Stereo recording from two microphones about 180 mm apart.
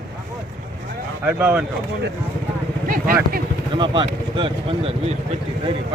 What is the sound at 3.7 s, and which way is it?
Speech, 25° right (ahead or behind).